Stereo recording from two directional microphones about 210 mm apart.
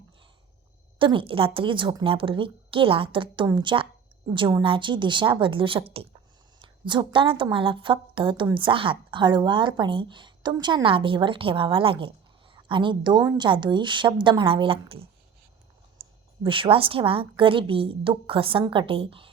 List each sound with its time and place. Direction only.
0.9 s a woman's voice: 25° right (ahead or behind)
16.0 s a sound: 25° right (ahead or behind)
16.4 s a woman's voice: 25° right (ahead or behind)